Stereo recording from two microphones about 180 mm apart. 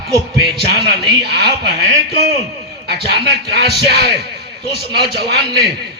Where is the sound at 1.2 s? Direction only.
65° right (ahead or behind).